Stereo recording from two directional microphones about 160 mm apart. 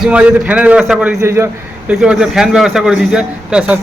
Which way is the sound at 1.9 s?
5° right (ahead or behind).